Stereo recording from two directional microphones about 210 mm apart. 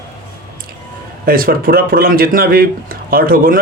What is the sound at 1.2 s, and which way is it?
Speech, 45° right (ahead or behind).